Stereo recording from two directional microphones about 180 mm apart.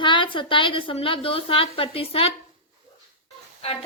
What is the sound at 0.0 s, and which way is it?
A woman's voice, 25° left (ahead or behind).